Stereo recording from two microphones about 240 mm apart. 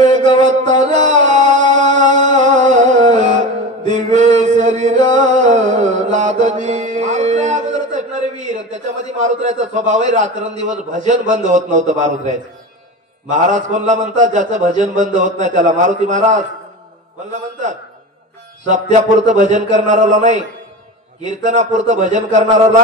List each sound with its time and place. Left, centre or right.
0.0 s music: right
1.8 s singing: right
2.6 s music: right
9.2 s a man's voice: right
13.3 s a man's voice: right